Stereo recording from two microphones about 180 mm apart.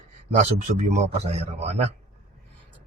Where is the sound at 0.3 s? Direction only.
40° right (ahead or behind).